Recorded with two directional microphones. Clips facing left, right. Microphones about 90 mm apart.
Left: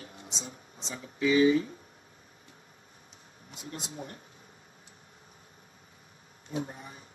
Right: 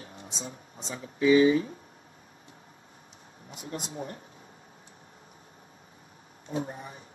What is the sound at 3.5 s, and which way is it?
Speech, 35° right (ahead or behind).